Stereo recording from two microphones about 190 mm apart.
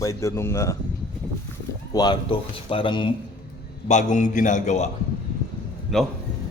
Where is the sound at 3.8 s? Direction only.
40° left (ahead or behind).